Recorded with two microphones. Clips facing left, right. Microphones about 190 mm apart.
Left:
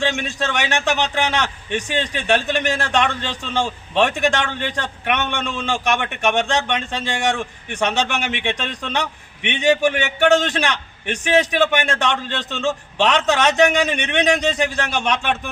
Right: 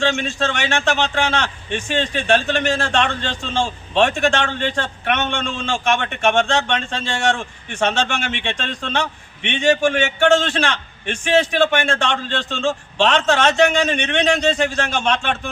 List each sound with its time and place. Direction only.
0.0 s speech: 15° left (ahead or behind)